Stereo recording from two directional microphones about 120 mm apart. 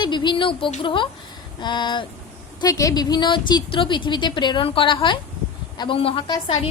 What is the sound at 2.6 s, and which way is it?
A woman's voice, 30° left (ahead or behind).